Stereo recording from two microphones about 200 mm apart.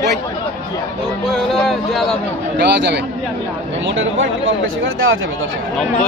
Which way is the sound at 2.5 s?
60° right (ahead or behind).